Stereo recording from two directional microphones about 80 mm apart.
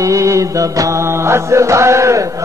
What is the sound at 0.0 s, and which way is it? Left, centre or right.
Mantra, right.